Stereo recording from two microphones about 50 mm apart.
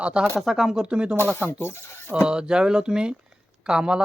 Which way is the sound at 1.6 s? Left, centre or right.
Left.